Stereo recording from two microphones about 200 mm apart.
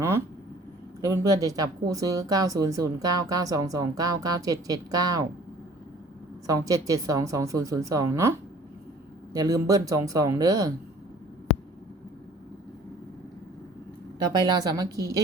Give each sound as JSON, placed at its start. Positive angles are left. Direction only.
{"t": 1.0, "sound": "speech", "side_deg": -15}
{"t": 6.5, "sound": "speech", "side_deg": -15}
{"t": 14.3, "sound": "a woman's voice", "side_deg": -20}